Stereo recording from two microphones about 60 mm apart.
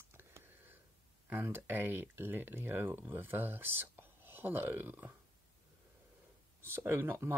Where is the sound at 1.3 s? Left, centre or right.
Right.